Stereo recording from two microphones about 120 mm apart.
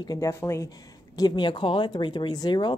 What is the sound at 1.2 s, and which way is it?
Speech, 40° left (ahead or behind).